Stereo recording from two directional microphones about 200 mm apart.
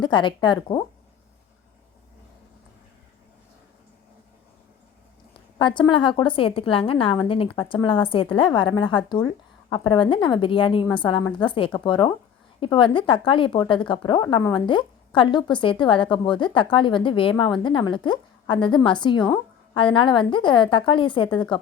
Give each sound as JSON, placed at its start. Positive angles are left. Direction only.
{"t": 0.0, "sound": "a woman's voice", "side_deg": 25}
{"t": 5.5, "sound": "a woman's voice", "side_deg": 25}